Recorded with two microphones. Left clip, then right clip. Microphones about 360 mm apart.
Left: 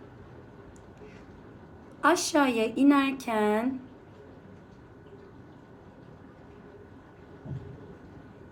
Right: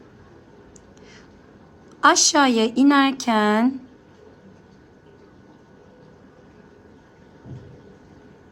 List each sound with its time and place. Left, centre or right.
2.0 s a woman's voice: right